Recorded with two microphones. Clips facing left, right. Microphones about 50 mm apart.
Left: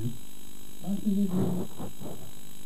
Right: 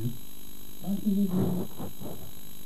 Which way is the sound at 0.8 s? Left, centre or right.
Centre.